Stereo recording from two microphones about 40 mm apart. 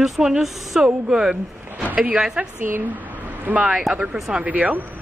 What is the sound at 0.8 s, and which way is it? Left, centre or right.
Speech, centre.